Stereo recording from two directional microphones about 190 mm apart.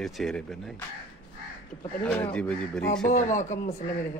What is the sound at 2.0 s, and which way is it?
Speech, 5° left (ahead or behind).